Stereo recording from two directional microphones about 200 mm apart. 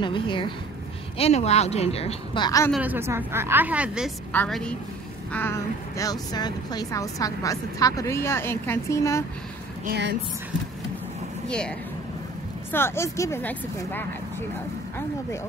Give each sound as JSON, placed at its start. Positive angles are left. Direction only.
{"t": 0.0, "sound": "a woman's voice", "side_deg": 25}
{"t": 2.7, "sound": "a woman's voice", "side_deg": -10}
{"t": 9.8, "sound": "speech", "side_deg": -60}
{"t": 11.4, "sound": "speech", "side_deg": 5}
{"t": 12.7, "sound": "speech", "side_deg": 10}